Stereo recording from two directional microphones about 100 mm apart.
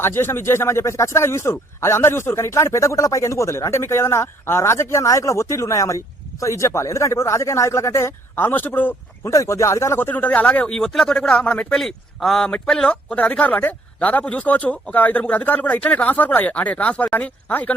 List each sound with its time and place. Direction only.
0.0 s a man's voice: 25° left (ahead or behind)
9.2 s speech: 30° left (ahead or behind); by 17.7 s 15° left (ahead or behind)